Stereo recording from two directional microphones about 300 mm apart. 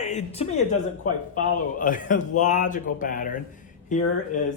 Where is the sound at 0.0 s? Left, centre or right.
Left.